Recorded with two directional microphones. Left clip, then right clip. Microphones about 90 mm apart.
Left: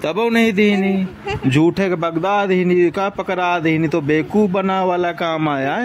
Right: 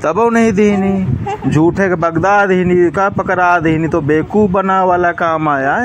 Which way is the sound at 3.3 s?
10° right (ahead or behind).